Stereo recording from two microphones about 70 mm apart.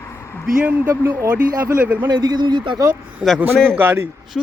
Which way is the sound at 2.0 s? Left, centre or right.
Right.